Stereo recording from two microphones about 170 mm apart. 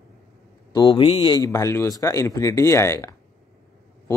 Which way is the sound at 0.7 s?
25° left (ahead or behind).